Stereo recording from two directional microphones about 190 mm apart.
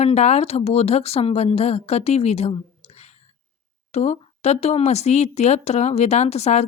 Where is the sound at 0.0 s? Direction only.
35° left (ahead or behind).